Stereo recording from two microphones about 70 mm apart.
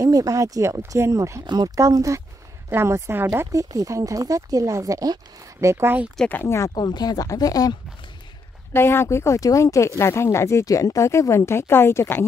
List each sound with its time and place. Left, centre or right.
0.0 s speech: right
1.4 s speech: right
1.8 s speech: right
2.7 s a woman's voice: right
3.5 s speech: right
5.6 s a woman's voice: right
6.4 s speech: left
6.7 s speech: left
7.2 s speech: left
8.7 s speech: left